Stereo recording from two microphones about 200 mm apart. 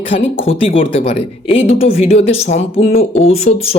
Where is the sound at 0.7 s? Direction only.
25° left (ahead or behind).